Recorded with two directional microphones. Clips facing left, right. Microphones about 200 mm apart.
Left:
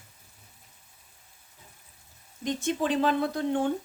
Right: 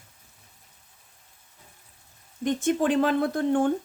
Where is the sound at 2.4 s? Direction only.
50° right (ahead or behind).